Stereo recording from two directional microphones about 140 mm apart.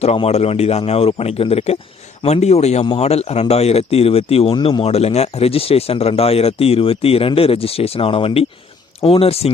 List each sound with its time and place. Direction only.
0.0 s speech: 50° left (ahead or behind)